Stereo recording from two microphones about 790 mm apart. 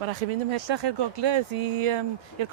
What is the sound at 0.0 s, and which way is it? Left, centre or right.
Speech, right.